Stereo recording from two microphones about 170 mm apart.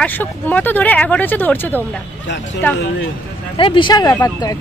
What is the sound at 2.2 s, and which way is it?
Speech, 90° left.